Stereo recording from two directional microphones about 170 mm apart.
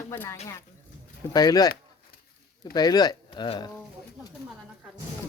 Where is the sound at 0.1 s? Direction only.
15° left (ahead or behind).